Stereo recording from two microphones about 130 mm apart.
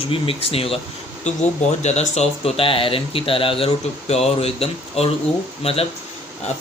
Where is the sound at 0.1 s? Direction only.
45° left (ahead or behind).